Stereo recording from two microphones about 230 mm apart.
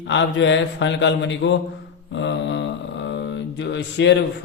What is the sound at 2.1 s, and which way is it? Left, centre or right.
Mantra, left.